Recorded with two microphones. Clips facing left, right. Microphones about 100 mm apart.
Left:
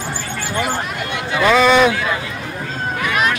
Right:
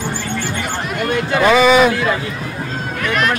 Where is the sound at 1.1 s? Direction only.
45° right (ahead or behind).